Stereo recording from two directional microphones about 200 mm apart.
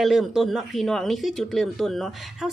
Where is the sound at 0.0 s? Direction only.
Centre (ahead or behind).